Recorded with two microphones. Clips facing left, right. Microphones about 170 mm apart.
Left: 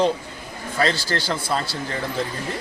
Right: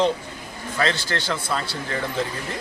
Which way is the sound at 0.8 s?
35° left (ahead or behind).